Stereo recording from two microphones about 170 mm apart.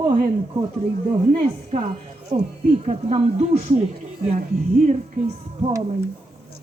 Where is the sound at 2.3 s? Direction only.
35° right (ahead or behind).